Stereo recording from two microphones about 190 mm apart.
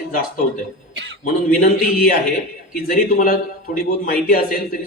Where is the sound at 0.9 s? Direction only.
70° right (ahead or behind).